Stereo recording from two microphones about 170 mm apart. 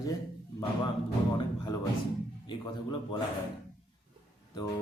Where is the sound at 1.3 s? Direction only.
25° left (ahead or behind).